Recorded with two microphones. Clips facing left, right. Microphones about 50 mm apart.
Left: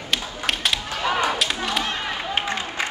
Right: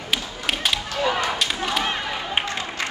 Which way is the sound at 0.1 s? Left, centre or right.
Centre.